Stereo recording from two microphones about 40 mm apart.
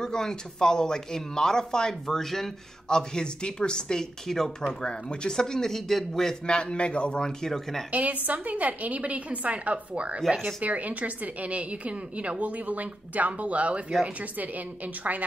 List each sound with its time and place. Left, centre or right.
0.0 s speech: centre
6.4 s a man's voice: left
7.4 s speech: centre
7.9 s a woman's voice: right